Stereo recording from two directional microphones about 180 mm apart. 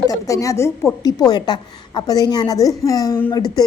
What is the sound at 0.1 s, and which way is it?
A woman's voice, 20° left (ahead or behind).